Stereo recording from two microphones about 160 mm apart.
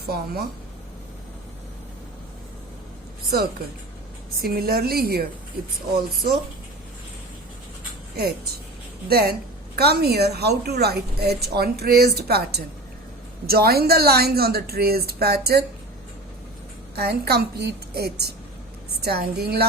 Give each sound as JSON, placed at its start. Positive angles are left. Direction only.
{"t": 0.0, "sound": "a woman's voice", "side_deg": -75}
{"t": 4.4, "sound": "a woman's voice", "side_deg": -70}
{"t": 9.0, "sound": "a woman's voice", "side_deg": -75}
{"t": 16.9, "sound": "a woman's voice", "side_deg": -75}